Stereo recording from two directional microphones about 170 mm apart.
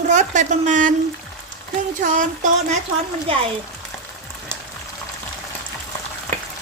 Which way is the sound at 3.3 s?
30° right (ahead or behind).